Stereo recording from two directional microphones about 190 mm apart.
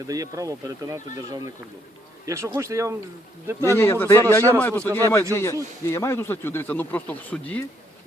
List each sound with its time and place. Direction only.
0.1 s speech: 20° right (ahead or behind)
2.2 s speech: 15° right (ahead or behind)
3.7 s speech: 15° left (ahead or behind)